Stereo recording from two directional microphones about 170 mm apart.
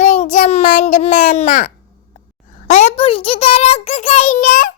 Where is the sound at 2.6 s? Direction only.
40° left (ahead or behind).